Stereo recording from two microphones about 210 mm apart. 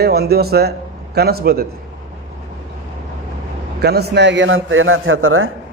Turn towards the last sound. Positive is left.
turn(degrees=-75)  # may be behind; listen again after turning